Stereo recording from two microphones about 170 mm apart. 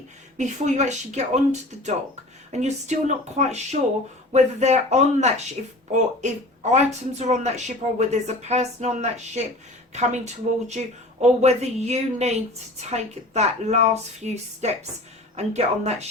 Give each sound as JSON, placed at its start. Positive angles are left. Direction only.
{"t": 0.3, "sound": "speech", "side_deg": -45}
{"t": 2.5, "sound": "speech", "side_deg": -40}